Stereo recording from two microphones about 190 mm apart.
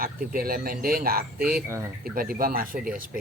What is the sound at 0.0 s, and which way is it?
Speech, 50° right (ahead or behind).